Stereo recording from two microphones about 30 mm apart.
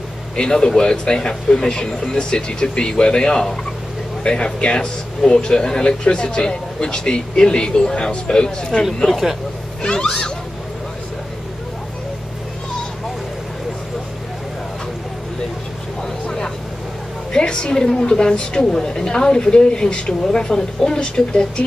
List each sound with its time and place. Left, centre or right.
0.4 s speech: left
9.8 s speech: left
16.0 s vehicle: left
17.3 s a woman's voice: left
17.7 s speech: left